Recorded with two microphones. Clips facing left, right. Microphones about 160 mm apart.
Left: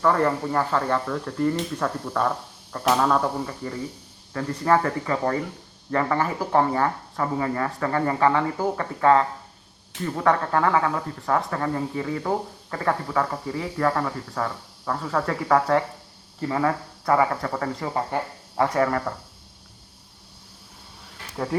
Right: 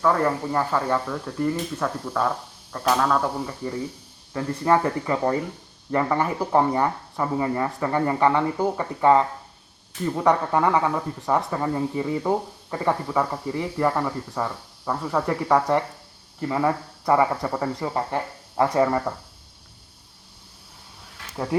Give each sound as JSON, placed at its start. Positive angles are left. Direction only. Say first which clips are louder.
{"t": 0.0, "sound": "speech", "louder": "even", "side_deg": -5}
{"t": 3.4, "sound": "speech", "louder": "right 2 dB", "side_deg": -10}